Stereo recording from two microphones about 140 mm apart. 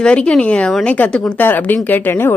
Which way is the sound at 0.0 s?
5° left (ahead or behind).